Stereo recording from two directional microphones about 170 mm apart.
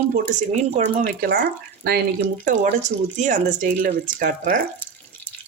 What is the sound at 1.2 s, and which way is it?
Speech, 60° right (ahead or behind).